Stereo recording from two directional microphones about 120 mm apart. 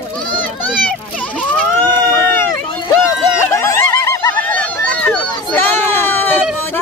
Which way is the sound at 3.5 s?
20° left (ahead or behind).